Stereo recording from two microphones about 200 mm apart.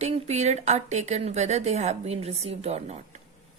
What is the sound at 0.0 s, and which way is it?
A woman's voice, 35° right (ahead or behind).